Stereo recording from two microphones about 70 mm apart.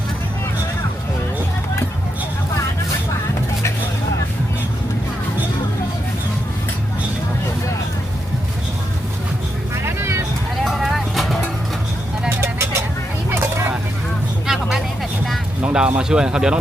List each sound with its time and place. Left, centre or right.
9.7 s vehicle: right
10.6 s vehicle: centre
12.3 s vehicle: right
13.3 s a sound: right
14.4 s vehicle: centre
15.6 s music: centre
16.0 s speech: centre